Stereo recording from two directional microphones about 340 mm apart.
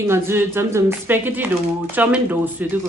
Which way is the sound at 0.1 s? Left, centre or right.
Centre.